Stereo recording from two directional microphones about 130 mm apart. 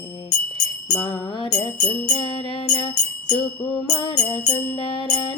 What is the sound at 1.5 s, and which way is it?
Music, 25° left (ahead or behind).